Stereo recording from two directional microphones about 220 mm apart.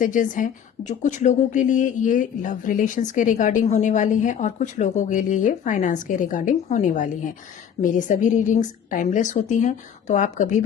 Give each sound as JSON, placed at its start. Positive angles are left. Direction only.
{"t": 0.0, "sound": "a woman's voice", "side_deg": 35}